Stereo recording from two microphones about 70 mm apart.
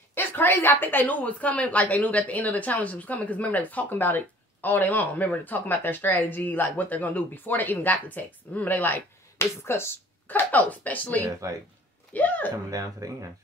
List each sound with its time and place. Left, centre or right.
0.1 s a woman's voice: left
10.2 s a woman's voice: left
11.4 s speech: right
12.1 s a sound: left
12.6 s speech: right